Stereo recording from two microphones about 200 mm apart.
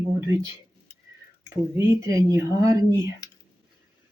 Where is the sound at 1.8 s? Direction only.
15° right (ahead or behind).